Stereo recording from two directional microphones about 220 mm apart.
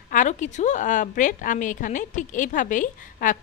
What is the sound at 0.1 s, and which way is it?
Speech, 35° left (ahead or behind).